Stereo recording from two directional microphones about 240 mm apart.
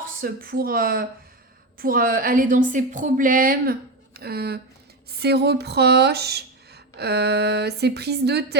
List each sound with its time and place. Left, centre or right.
0.2 s a woman's voice: right